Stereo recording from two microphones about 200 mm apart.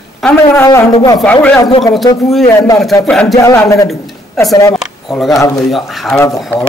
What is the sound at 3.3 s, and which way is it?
Speech, 15° left (ahead or behind).